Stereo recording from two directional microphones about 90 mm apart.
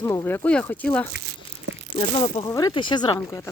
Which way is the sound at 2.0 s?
90° left.